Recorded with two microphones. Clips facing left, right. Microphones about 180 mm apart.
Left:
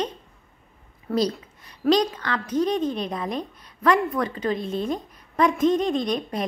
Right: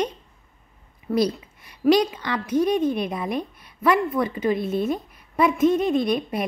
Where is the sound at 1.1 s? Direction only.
10° right (ahead or behind).